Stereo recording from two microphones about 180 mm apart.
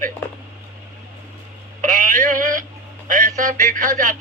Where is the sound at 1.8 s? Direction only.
45° right (ahead or behind).